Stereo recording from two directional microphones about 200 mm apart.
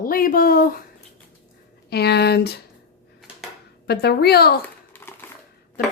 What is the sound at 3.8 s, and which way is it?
Speech, 55° left (ahead or behind).